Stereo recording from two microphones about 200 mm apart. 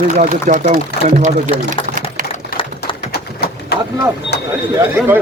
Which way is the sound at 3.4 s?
55° left (ahead or behind).